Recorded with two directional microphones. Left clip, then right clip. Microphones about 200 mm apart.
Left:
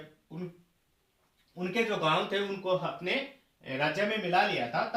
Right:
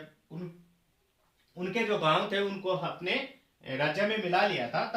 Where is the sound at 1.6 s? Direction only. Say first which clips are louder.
Even; 15° right (ahead or behind).